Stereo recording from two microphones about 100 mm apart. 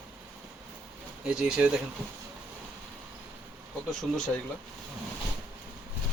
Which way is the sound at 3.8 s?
10° left (ahead or behind).